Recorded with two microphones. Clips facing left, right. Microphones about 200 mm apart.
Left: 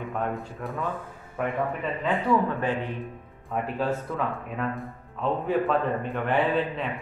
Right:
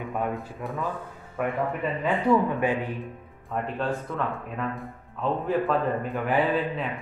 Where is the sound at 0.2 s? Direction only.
Centre (ahead or behind).